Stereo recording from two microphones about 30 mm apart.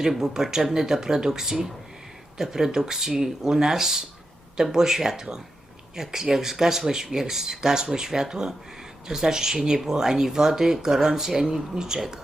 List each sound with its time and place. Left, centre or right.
0.2 s speech: centre